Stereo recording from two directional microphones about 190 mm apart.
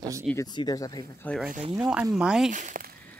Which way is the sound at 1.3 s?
5° left (ahead or behind).